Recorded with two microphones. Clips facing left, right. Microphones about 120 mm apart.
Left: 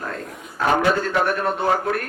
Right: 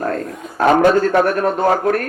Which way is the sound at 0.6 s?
45° right (ahead or behind).